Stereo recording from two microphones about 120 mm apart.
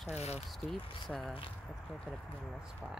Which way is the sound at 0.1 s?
65° left (ahead or behind).